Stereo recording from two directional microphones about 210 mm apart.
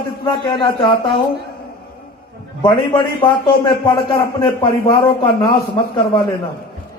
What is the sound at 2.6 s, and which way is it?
A man's voice, 25° left (ahead or behind).